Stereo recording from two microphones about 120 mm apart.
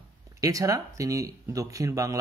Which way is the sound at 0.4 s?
30° right (ahead or behind).